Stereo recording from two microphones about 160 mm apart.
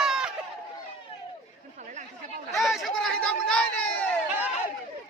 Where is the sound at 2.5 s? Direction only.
Centre (ahead or behind).